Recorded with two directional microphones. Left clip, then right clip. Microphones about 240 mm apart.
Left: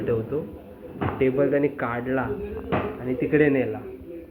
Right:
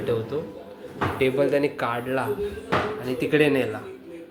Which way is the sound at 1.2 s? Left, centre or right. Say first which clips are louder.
Even; centre.